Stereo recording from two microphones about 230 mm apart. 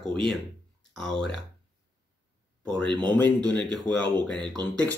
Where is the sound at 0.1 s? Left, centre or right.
Centre.